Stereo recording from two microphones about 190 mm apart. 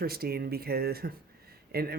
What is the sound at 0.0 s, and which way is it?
Speech, 55° right (ahead or behind).